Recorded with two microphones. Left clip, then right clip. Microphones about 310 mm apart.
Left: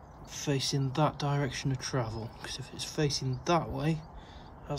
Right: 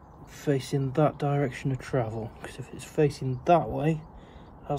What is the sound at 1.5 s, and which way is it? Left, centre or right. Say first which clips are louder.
Speech: right 2 dB; left.